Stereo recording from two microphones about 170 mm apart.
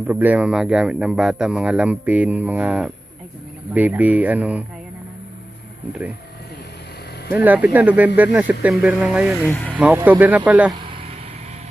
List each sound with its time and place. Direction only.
0.0 s speech: 10° right (ahead or behind)
7.2 s speech: 10° right (ahead or behind)
10.7 s vehicle: 30° right (ahead or behind)